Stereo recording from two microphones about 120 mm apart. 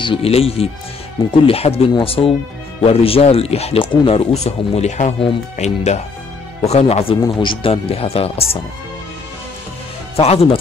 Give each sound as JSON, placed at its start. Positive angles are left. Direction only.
{"t": 0.0, "sound": "speech", "side_deg": 50}
{"t": 4.3, "sound": "speech", "side_deg": 60}
{"t": 10.1, "sound": "speech", "side_deg": 55}